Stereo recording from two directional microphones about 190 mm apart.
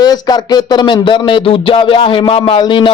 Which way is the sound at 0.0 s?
20° left (ahead or behind).